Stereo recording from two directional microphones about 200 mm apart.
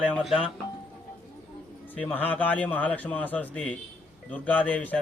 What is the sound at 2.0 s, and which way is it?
A man's voice, 5° left (ahead or behind).